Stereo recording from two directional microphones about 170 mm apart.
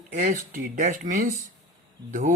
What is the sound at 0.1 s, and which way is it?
Speech, 50° right (ahead or behind).